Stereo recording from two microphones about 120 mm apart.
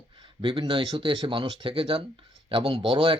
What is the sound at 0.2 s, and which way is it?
Speech, 40° right (ahead or behind).